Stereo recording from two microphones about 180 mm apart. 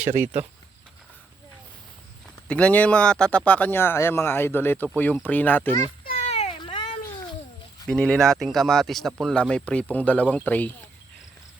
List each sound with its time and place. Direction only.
0.1 s speech: 15° right (ahead or behind)
2.5 s speech: 5° left (ahead or behind)
6.1 s a sound: 35° left (ahead or behind)
7.9 s speech: 5° left (ahead or behind)